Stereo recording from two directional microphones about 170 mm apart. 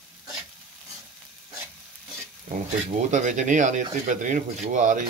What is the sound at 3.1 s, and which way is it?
Speech, 45° right (ahead or behind).